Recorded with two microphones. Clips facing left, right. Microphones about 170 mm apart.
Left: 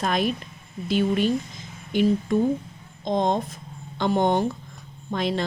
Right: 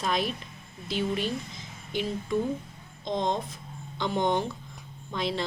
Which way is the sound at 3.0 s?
50° left (ahead or behind).